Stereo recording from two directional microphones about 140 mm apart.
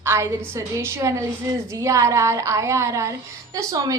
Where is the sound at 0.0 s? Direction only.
20° right (ahead or behind).